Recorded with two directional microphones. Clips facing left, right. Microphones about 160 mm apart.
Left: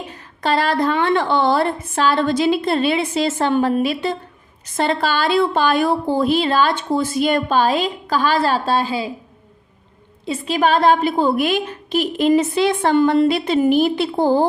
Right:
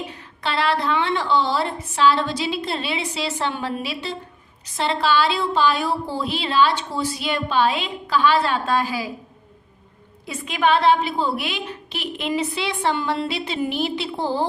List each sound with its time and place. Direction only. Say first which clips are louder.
0.1 s a woman's voice: left 7 dB; 45° left (ahead or behind); by 9.1 s 25° left (ahead or behind)
10.2 s a woman's voice: left 3 dB; 30° left (ahead or behind); by 14.4 s 50° left (ahead or behind)